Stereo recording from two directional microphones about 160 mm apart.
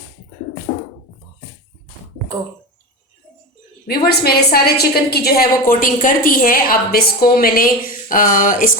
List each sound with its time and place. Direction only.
3.8 s a woman's voice: 75° left (ahead or behind); by 8.7 s 55° left (ahead or behind)